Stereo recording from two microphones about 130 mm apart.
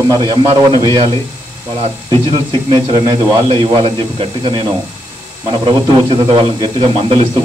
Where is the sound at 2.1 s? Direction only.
35° right (ahead or behind).